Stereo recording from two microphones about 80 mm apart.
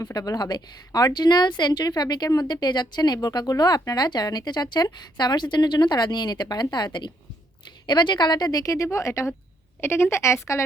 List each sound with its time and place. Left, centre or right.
0.0 s a woman's voice: left